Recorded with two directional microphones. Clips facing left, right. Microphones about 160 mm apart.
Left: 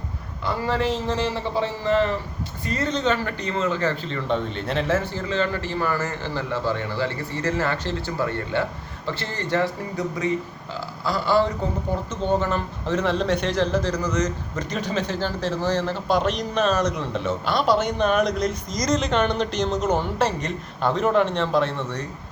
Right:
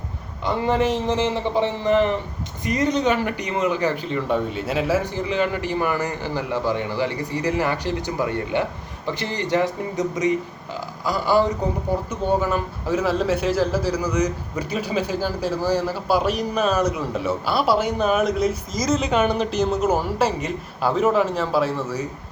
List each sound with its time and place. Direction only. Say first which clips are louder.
0.4 s a man's voice: right 3 dB; 20° right (ahead or behind); by 22.0 s 5° right (ahead or behind)